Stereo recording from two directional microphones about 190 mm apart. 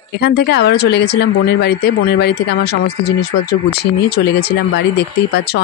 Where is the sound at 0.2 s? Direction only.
60° left (ahead or behind).